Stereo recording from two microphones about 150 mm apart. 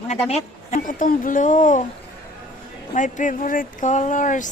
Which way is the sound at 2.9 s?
60° left (ahead or behind).